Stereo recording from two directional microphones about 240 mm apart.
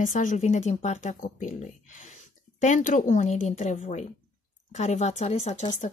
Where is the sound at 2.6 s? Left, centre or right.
Left.